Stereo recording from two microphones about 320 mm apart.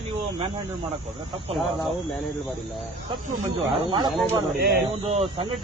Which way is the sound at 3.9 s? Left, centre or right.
Centre.